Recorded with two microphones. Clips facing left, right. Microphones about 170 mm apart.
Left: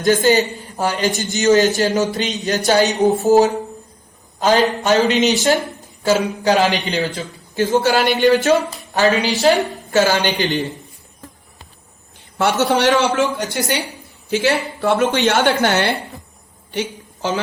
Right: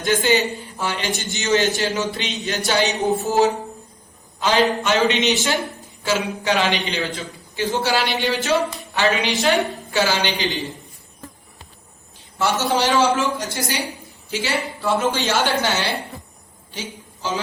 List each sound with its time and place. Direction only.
0.0 s a man's voice: 40° left (ahead or behind)
12.4 s a woman's voice: 60° left (ahead or behind)